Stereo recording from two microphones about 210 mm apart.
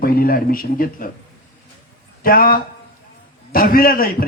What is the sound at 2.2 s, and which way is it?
Speech, 45° left (ahead or behind).